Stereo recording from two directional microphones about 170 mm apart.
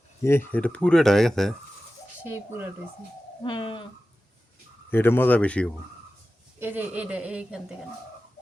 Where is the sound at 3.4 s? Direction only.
30° left (ahead or behind).